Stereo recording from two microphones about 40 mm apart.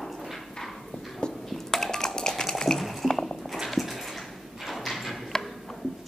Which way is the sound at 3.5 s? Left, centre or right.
Centre.